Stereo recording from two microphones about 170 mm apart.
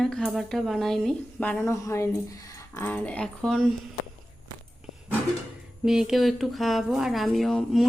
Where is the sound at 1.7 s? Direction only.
15° left (ahead or behind).